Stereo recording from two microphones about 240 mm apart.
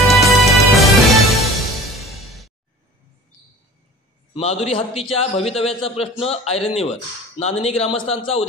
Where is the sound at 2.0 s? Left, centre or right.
Centre.